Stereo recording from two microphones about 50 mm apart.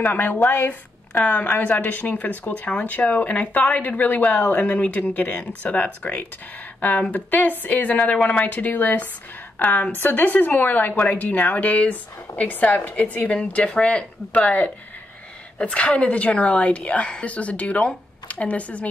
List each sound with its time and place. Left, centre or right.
0.0 s a woman's voice: left